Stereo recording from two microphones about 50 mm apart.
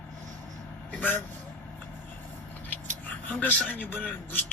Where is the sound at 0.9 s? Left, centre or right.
Left.